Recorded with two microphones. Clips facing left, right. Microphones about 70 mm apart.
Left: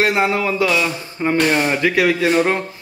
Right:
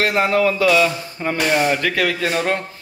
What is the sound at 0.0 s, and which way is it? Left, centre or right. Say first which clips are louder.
A man's voice: even; centre.